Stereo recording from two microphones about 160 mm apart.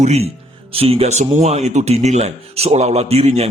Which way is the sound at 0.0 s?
40° right (ahead or behind).